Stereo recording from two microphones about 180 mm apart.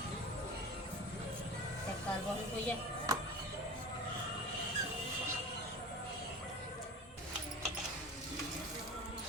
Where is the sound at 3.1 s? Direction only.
20° right (ahead or behind).